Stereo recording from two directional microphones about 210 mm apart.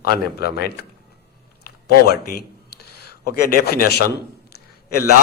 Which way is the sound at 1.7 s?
45° left (ahead or behind).